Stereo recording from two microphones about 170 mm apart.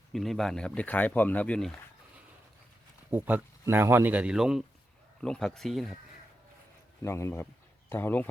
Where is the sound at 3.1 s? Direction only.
10° right (ahead or behind).